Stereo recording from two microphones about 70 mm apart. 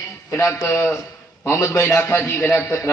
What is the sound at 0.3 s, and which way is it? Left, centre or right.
A man's voice, left.